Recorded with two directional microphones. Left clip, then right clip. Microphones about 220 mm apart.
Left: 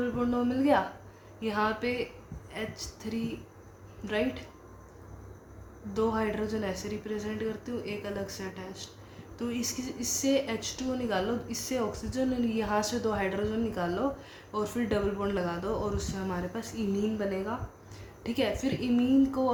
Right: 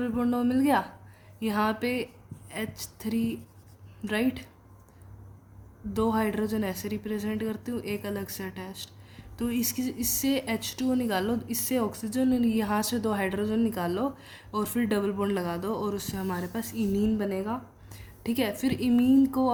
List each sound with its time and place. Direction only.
0.0 s speech: 45° right (ahead or behind)
5.9 s speech: 50° right (ahead or behind)